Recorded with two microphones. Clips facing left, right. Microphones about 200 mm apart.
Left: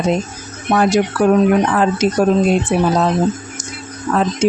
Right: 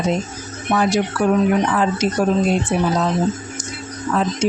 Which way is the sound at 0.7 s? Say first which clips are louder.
Left 4 dB; 50° left (ahead or behind).